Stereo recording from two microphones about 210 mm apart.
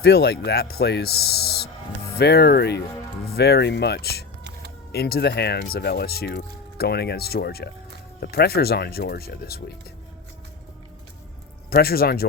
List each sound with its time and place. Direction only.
0.0 s speech: 50° left (ahead or behind)
11.7 s speech: 45° left (ahead or behind)